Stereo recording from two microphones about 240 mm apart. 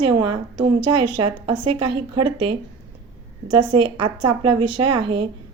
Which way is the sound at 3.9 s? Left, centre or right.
Right.